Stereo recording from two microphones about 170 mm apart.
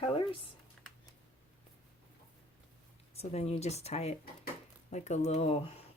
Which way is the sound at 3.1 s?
40° left (ahead or behind).